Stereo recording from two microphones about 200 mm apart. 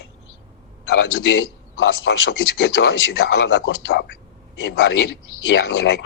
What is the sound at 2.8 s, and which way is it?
Speech, 70° left (ahead or behind).